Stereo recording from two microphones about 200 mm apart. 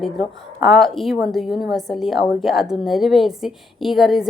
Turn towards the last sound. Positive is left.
turn(degrees=0)  # may be behind; listen again after turning